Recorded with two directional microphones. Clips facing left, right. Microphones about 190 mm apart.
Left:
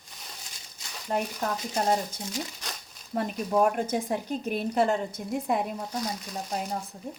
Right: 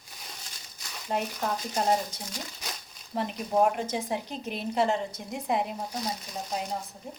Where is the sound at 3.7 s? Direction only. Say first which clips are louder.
Left 3 dB; 50° left (ahead or behind).